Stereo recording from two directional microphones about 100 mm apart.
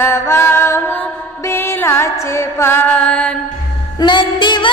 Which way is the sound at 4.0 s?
50° left (ahead or behind).